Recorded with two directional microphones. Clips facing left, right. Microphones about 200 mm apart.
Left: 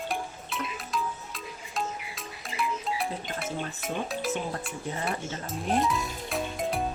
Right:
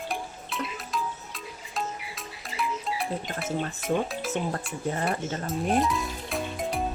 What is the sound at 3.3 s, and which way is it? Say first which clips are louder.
Speech: right 3 dB; centre (ahead or behind).